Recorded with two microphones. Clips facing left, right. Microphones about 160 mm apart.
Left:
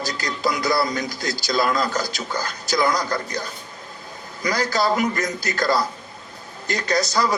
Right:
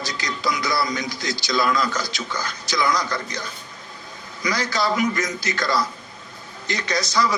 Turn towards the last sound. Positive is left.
turn(degrees=50)  # may be behind; listen again after turning